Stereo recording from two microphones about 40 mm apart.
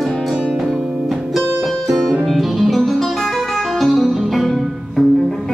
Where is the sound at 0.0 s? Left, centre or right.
Centre.